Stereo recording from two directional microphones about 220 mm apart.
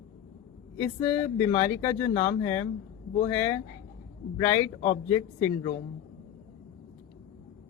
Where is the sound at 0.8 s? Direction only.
10° left (ahead or behind).